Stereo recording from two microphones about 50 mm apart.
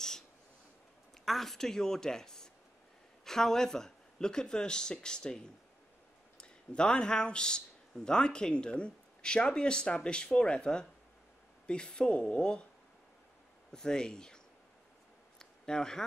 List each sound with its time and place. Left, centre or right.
1.2 s speech: centre
13.7 s speech: centre
15.3 s a sound: centre